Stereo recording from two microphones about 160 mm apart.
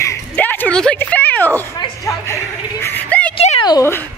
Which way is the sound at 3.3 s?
40° left (ahead or behind).